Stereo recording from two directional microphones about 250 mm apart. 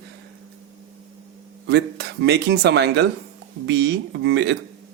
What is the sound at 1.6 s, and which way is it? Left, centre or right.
Speech, right.